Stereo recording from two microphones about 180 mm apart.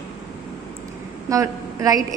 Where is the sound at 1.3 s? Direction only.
20° right (ahead or behind).